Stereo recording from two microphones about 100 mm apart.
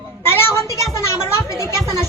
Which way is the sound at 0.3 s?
25° left (ahead or behind).